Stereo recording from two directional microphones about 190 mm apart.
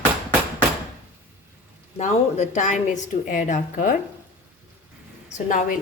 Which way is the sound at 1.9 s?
40° left (ahead or behind).